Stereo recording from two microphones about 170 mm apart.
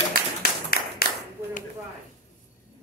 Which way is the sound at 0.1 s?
60° left (ahead or behind).